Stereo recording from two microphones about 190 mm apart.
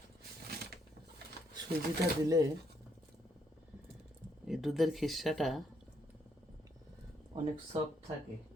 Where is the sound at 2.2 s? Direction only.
20° right (ahead or behind).